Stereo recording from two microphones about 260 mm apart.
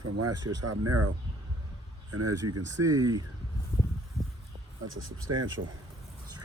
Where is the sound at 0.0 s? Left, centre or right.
Right.